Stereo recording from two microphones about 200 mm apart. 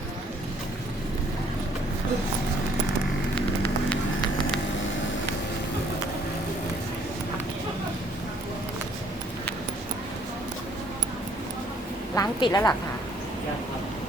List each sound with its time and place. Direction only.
12.1 s a woman's voice: 20° left (ahead or behind)